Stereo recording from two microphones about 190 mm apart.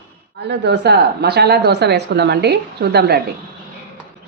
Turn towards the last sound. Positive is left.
turn(degrees=-60)  # may be behind; listen again after turning